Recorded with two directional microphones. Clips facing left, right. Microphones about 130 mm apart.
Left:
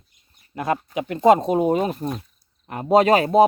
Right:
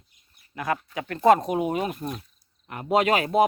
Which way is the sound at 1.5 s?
35° left (ahead or behind).